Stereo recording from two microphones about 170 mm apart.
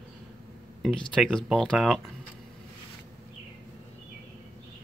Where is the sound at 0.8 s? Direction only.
5° left (ahead or behind).